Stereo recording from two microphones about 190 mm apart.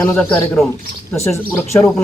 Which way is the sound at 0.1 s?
5° left (ahead or behind).